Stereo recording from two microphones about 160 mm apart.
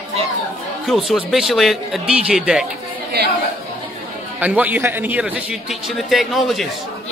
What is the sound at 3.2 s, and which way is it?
Speech, 90° right.